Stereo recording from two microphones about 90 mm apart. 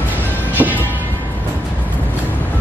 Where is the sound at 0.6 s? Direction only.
20° right (ahead or behind).